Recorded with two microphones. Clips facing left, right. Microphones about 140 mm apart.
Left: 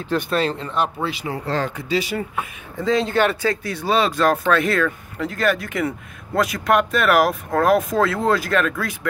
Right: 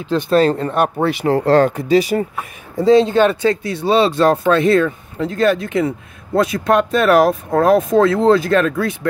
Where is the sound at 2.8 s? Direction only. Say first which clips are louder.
Right 9 dB; 30° right (ahead or behind).